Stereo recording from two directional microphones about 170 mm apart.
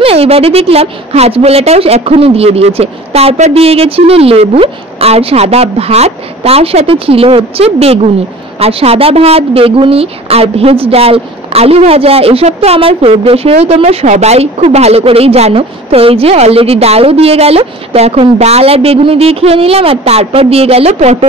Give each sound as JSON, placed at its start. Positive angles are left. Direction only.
{"t": 0.0, "sound": "a woman's voice", "side_deg": -35}